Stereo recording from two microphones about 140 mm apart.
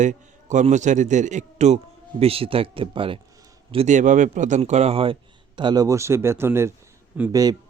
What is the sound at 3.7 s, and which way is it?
Speech, 55° right (ahead or behind).